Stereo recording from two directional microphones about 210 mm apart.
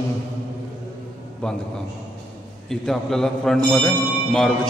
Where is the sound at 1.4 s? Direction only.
5° left (ahead or behind).